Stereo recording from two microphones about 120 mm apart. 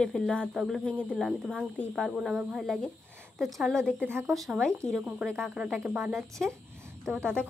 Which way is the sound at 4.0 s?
20° right (ahead or behind).